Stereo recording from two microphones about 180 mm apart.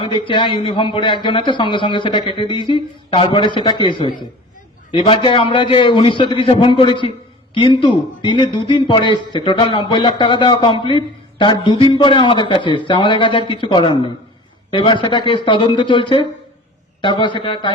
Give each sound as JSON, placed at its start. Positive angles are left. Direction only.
{"t": 0.0, "sound": "a man's voice", "side_deg": 25}